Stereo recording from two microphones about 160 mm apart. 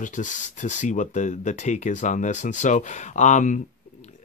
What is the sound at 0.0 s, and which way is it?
Speech, 50° left (ahead or behind).